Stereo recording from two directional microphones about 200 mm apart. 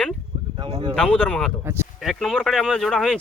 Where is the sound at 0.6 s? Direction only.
25° right (ahead or behind).